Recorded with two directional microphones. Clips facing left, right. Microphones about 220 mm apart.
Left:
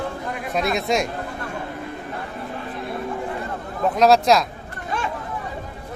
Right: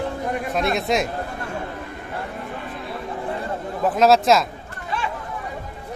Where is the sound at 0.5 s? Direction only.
Centre (ahead or behind).